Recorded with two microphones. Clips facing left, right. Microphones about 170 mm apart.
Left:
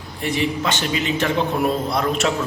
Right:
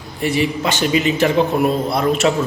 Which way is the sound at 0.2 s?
10° right (ahead or behind).